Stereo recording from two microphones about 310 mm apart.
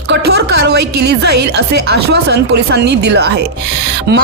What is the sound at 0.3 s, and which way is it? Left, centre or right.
A woman's voice, right.